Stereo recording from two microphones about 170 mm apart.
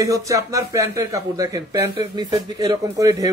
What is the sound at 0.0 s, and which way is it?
Speech, 20° right (ahead or behind).